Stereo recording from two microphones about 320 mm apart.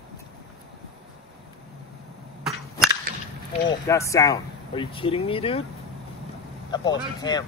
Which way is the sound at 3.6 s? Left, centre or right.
Centre.